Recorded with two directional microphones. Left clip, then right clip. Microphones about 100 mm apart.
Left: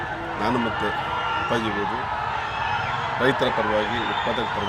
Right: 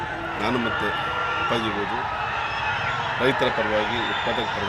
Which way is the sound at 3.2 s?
10° left (ahead or behind).